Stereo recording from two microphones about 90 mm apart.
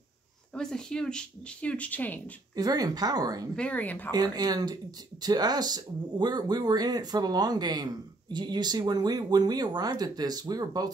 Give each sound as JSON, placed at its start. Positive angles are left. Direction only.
{"t": 0.6, "sound": "speech", "side_deg": 5}
{"t": 2.5, "sound": "speech", "side_deg": -45}
{"t": 3.5, "sound": "speech", "side_deg": 15}
{"t": 4.1, "sound": "speech", "side_deg": -45}